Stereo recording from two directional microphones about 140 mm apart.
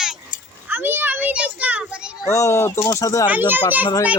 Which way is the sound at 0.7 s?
15° right (ahead or behind).